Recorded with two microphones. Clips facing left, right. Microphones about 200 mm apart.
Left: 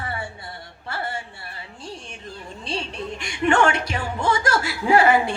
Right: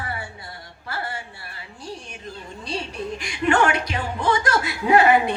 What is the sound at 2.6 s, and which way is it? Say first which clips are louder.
Music: even; 25° left (ahead or behind).